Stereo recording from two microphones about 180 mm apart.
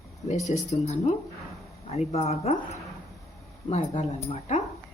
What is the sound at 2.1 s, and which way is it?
Speech, 35° left (ahead or behind).